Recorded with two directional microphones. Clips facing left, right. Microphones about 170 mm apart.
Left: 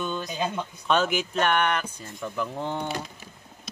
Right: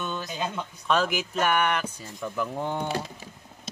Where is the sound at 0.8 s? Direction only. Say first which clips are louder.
Left 1 dB; centre (ahead or behind).